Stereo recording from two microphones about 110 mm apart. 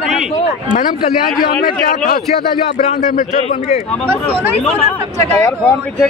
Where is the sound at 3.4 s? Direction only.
80° left.